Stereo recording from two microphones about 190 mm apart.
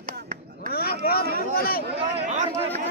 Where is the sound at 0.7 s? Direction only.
55° left (ahead or behind).